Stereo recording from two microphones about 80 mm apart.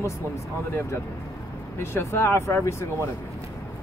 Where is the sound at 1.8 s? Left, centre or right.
Left.